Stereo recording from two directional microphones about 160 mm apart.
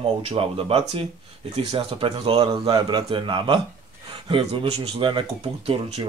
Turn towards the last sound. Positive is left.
turn(degrees=-35)  # may be behind; listen again after turning